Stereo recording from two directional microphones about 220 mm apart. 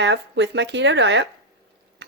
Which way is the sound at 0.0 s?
55° right (ahead or behind).